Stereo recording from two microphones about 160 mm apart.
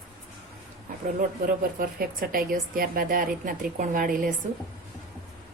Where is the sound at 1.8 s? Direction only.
65° right (ahead or behind).